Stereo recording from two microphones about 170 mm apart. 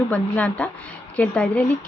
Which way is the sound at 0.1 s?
5° left (ahead or behind).